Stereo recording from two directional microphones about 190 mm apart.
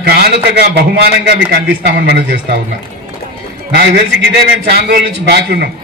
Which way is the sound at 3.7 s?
60° right (ahead or behind).